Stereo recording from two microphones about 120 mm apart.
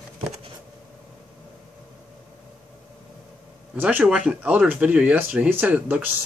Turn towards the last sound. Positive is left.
turn(degrees=-10)  # may be behind; listen again after turning